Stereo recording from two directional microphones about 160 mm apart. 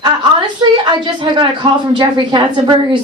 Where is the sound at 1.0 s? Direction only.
30° right (ahead or behind).